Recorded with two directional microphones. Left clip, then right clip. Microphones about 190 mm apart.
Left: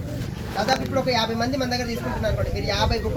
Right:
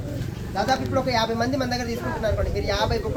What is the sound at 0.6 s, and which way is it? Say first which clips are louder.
A man's voice: even; 5° left (ahead or behind).